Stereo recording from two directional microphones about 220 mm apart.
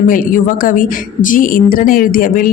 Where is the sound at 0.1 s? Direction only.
40° left (ahead or behind).